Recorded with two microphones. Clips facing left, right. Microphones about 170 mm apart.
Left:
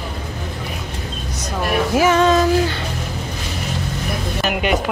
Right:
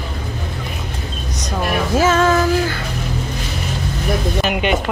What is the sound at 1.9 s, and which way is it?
Speech, 15° left (ahead or behind).